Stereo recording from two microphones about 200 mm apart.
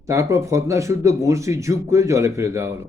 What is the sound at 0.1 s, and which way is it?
A man's voice, 15° right (ahead or behind).